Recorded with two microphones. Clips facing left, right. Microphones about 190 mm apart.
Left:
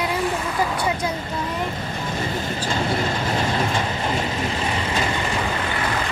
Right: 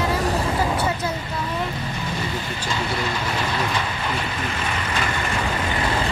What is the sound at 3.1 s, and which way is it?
Vehicle, 30° left (ahead or behind).